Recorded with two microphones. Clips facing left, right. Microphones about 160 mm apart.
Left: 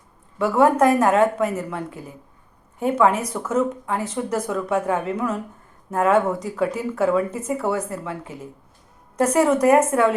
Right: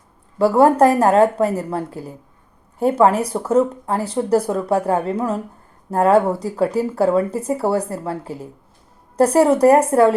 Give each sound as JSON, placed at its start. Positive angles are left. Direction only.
{"t": 0.3, "sound": "speech", "side_deg": -35}